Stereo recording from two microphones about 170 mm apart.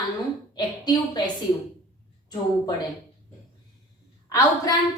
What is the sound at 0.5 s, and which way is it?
Speech, 25° left (ahead or behind).